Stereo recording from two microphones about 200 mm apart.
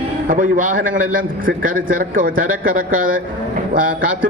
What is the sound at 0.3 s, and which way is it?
A man's voice, 40° right (ahead or behind).